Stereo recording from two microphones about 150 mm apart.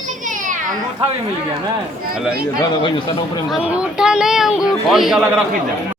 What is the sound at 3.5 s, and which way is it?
Speech, 10° right (ahead or behind).